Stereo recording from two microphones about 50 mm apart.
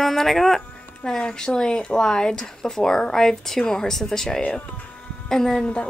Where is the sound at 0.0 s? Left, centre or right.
Centre.